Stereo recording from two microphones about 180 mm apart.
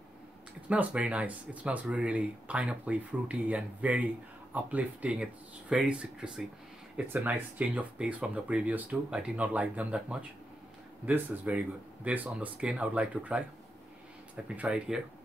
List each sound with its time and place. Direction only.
0.7 s speech: 5° right (ahead or behind)